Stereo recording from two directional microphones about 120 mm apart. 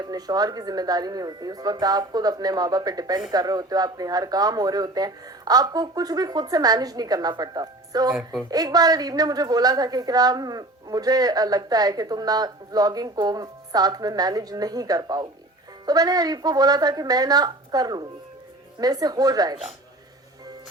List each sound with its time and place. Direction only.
0.0 s a woman's voice: 35° right (ahead or behind)
8.1 s a woman's voice: 10° right (ahead or behind)
8.4 s a woman's voice: 35° right (ahead or behind)